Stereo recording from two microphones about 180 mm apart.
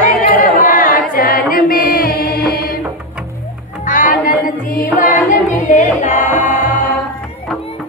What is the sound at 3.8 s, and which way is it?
Music, 45° left (ahead or behind).